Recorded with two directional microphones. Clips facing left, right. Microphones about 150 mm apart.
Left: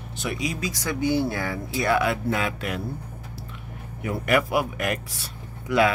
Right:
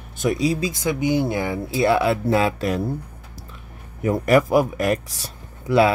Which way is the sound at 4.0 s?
40° right (ahead or behind).